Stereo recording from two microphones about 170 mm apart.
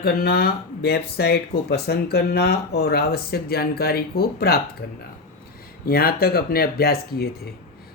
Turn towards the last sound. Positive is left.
turn(degrees=65)  # may be behind; listen again after turning